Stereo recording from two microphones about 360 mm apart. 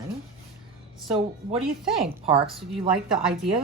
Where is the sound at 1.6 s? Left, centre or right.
Centre.